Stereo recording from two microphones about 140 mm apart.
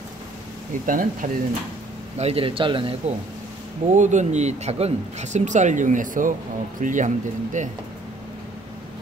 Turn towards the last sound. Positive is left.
turn(degrees=-60)  # may be behind; listen again after turning